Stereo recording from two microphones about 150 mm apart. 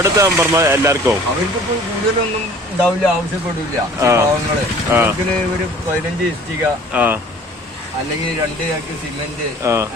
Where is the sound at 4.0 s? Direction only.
20° right (ahead or behind).